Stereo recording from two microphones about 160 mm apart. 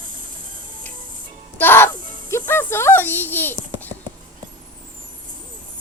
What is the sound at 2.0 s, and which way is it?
Music, 55° right (ahead or behind).